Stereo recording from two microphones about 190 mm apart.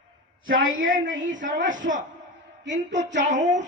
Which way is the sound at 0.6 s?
90° right.